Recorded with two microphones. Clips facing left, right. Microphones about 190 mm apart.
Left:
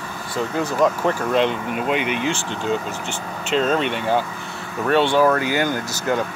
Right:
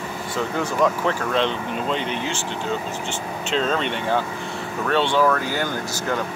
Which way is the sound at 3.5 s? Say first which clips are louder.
Left 3 dB; 5° left (ahead or behind).